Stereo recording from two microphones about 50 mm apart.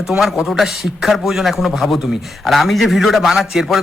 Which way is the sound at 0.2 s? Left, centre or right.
Centre.